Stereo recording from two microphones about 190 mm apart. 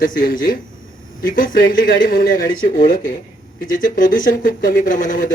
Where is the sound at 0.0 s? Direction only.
50° left (ahead or behind).